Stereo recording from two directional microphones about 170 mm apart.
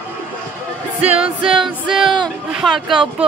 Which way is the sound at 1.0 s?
5° right (ahead or behind).